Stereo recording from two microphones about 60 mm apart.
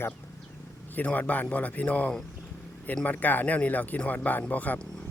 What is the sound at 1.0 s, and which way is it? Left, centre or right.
Speech, left.